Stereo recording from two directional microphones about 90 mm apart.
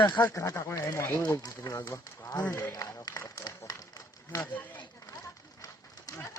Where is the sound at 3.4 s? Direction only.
45° left (ahead or behind).